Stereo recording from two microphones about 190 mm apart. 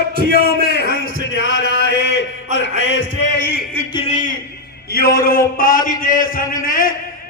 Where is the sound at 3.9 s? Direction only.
25° left (ahead or behind).